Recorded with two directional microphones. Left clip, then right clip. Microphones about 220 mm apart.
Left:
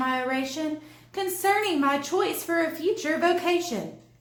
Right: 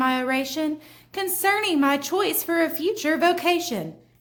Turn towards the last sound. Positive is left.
turn(degrees=-40)  # may be behind; listen again after turning